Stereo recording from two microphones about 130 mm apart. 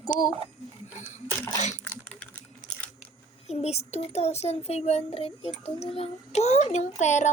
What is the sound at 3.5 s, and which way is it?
A child's voice, 55° left (ahead or behind).